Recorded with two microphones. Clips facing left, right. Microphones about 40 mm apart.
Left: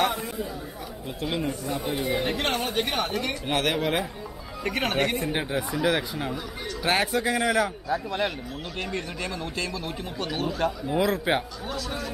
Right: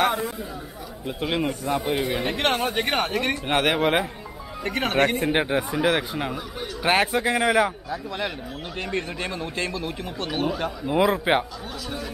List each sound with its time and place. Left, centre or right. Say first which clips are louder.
1.2 s speech: right 3 dB; right
3.4 s a man's voice: right 4 dB; right
5.6 s a man's voice: right 2 dB; centre
7.9 s speech: left 2 dB; centre
8.8 s speech: right 4 dB; right
10.1 s a man's voice: right 3 dB; centre